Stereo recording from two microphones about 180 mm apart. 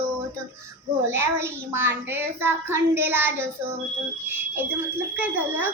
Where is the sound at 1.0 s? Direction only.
15° right (ahead or behind).